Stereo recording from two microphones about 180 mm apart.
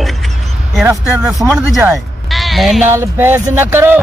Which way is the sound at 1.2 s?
Centre (ahead or behind).